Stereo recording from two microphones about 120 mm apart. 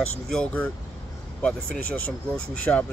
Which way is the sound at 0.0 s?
10° left (ahead or behind).